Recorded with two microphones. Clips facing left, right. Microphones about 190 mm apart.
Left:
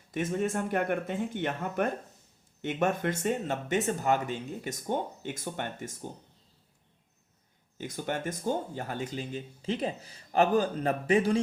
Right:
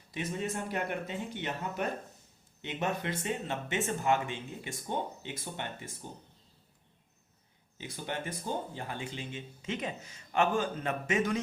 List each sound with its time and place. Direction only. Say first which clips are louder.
0.1 s speech: left 6 dB; 50° left (ahead or behind)
7.8 s speech: left 5 dB; 45° left (ahead or behind)